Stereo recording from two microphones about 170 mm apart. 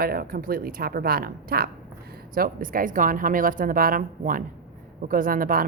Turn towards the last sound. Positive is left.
turn(degrees=-55)  # may be behind; listen again after turning